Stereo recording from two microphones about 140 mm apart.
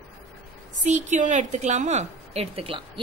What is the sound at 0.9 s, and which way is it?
A woman's voice, 60° right (ahead or behind).